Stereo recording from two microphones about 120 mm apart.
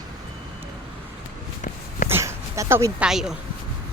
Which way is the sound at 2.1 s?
25° right (ahead or behind).